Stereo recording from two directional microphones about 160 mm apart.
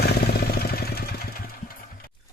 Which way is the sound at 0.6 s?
75° left (ahead or behind).